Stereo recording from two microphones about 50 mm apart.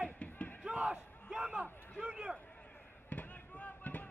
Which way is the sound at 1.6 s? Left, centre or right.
Centre.